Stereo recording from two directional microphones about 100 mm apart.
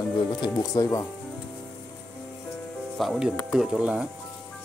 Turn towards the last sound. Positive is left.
turn(degrees=-10)  # may be behind; listen again after turning